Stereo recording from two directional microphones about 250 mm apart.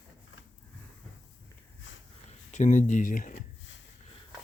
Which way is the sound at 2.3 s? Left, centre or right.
Left.